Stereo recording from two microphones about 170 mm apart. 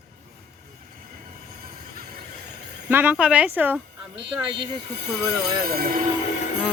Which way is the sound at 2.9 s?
10° right (ahead or behind).